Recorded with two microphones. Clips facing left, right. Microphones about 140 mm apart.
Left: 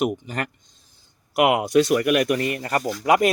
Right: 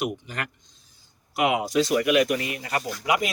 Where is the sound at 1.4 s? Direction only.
65° left (ahead or behind); by 3.2 s 50° left (ahead or behind).